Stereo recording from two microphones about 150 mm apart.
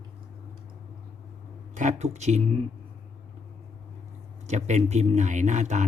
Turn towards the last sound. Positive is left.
turn(degrees=-50)  # may be behind; listen again after turning